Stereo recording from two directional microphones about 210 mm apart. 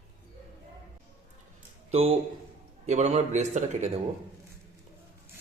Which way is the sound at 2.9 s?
30° right (ahead or behind).